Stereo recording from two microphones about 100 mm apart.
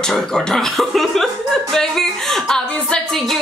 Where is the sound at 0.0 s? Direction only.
5° left (ahead or behind).